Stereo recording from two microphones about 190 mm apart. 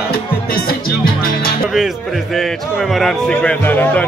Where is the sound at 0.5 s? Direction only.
50° left (ahead or behind).